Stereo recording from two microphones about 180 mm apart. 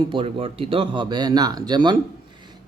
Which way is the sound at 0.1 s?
30° right (ahead or behind).